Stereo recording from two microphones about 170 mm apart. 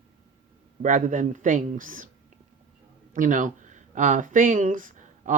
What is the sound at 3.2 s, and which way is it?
Speech, 50° right (ahead or behind).